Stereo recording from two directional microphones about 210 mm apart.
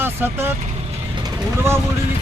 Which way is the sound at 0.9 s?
20° right (ahead or behind).